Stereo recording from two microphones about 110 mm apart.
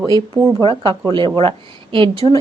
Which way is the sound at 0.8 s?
45° right (ahead or behind).